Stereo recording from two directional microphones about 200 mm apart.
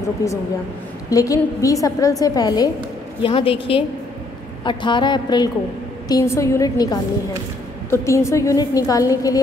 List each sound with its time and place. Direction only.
0.2 s a woman's voice: 15° left (ahead or behind)